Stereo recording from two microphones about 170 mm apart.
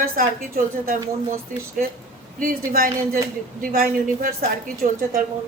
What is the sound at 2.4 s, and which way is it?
A woman's voice, 55° right (ahead or behind).